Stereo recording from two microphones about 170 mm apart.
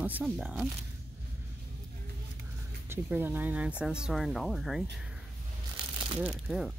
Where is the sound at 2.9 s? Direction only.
10° right (ahead or behind).